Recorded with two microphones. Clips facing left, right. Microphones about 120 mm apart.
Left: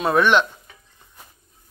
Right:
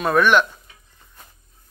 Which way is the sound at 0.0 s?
25° left (ahead or behind).